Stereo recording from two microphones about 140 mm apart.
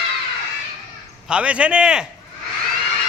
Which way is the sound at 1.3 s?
10° right (ahead or behind).